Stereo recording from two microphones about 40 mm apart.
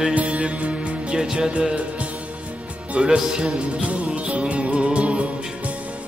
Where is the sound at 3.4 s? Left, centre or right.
Right.